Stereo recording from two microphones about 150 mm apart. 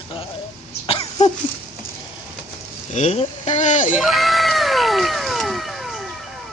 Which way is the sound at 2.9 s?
45° left (ahead or behind).